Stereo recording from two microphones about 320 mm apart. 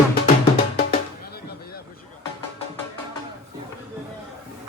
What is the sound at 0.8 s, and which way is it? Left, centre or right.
Music, left.